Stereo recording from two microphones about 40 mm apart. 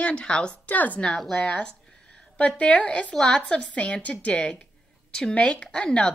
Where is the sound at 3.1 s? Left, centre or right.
Centre.